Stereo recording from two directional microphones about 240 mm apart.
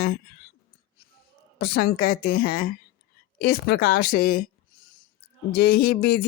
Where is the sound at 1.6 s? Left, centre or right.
Left.